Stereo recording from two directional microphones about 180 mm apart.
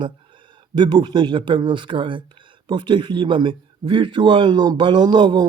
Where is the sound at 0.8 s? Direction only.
25° right (ahead or behind).